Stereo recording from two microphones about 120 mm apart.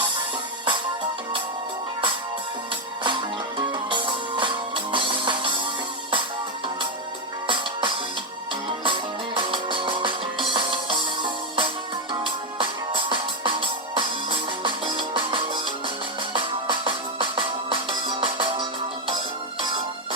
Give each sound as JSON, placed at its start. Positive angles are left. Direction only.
{"t": 3.7, "sound": "music", "side_deg": -40}
{"t": 7.4, "sound": "music", "side_deg": -40}